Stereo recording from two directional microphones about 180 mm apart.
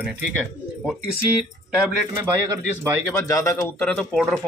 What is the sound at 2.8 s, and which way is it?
Speech, 15° left (ahead or behind).